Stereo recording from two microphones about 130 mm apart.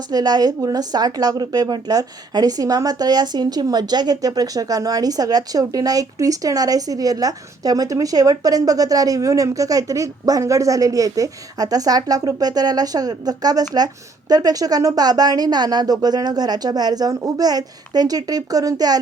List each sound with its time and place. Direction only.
0.1 s a woman's voice: 30° right (ahead or behind)